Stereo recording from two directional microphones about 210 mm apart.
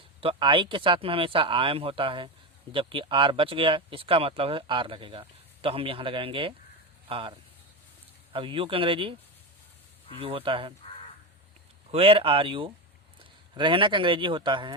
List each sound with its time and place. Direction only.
0.2 s speech: 25° right (ahead or behind)
10.2 s speech: 25° right (ahead or behind)
11.9 s speech: 25° right (ahead or behind)